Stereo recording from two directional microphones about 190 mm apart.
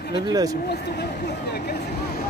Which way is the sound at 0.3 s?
20° right (ahead or behind).